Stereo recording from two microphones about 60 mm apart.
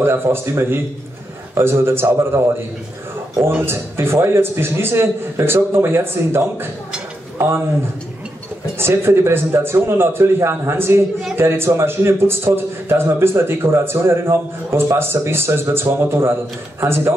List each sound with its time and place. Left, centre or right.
0.0 s a man's voice: right
3.6 s a man's voice: right
8.7 s a man's voice: right